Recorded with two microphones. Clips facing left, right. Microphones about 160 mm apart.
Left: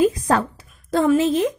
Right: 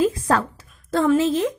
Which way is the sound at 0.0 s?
15° left (ahead or behind).